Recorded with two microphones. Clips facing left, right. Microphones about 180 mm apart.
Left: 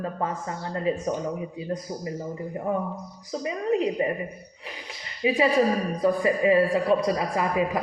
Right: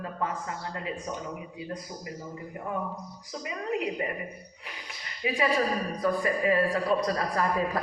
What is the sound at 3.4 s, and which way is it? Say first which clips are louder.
Speech: left 6 dB; 30° left (ahead or behind).